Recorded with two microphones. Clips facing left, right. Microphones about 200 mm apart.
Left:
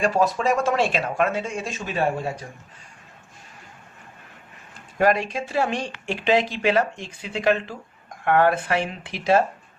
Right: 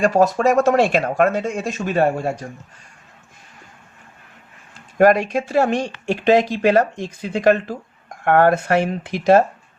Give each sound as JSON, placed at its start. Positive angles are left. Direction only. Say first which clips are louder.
{"t": 0.0, "sound": "speech", "louder": "right 5 dB", "side_deg": -45}
{"t": 4.9, "sound": "speech", "louder": "right 6 dB", "side_deg": -45}